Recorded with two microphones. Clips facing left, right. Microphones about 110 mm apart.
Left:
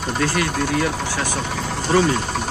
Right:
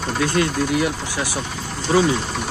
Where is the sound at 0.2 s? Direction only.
20° right (ahead or behind).